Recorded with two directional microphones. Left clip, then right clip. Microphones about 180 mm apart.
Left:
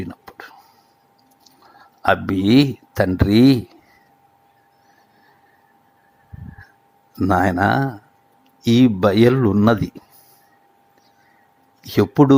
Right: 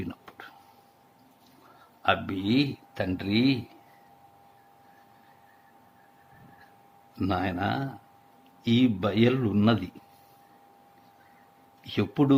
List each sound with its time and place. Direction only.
0.0 s whispering: 30° left (ahead or behind)
2.0 s speech: 45° left (ahead or behind)
7.2 s speech: 15° left (ahead or behind)
7.4 s speech: 40° left (ahead or behind)
11.9 s speech: 35° left (ahead or behind)